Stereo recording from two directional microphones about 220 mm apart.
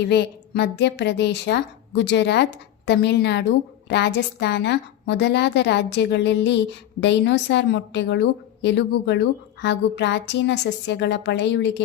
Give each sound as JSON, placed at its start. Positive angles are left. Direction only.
{"t": 0.0, "sound": "a woman's voice", "side_deg": 50}